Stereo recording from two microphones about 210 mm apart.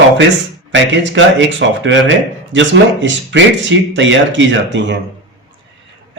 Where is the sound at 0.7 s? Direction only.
60° right (ahead or behind).